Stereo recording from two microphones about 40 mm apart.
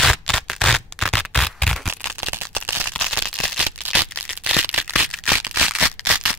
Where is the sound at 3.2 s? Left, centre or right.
Right.